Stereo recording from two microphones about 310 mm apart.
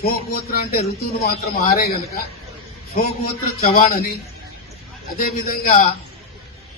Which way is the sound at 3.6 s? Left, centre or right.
Left.